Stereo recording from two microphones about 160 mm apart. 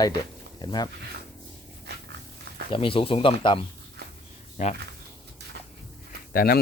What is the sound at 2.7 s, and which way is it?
Speech, 35° left (ahead or behind).